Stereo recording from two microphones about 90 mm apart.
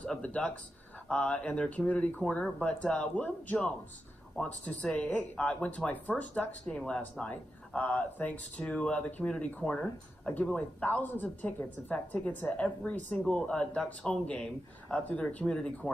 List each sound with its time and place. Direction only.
0.0 s speech: 15° left (ahead or behind)